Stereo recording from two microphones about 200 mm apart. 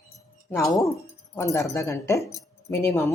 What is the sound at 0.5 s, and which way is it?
A woman's voice, 15° left (ahead or behind).